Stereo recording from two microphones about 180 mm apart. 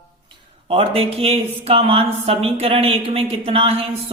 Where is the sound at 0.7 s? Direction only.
30° right (ahead or behind).